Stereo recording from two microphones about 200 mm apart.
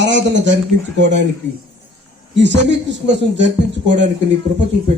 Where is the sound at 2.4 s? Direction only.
60° right (ahead or behind).